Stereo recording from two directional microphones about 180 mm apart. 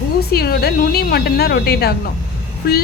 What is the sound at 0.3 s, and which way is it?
A woman's voice, 60° left (ahead or behind).